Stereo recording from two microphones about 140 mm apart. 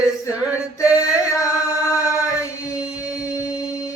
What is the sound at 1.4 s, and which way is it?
Music, 25° left (ahead or behind).